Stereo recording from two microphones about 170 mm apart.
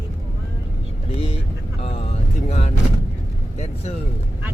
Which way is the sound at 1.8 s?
35° left (ahead or behind).